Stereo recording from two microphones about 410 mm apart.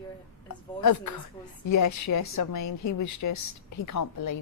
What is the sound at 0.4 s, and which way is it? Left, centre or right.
A woman's voice, left.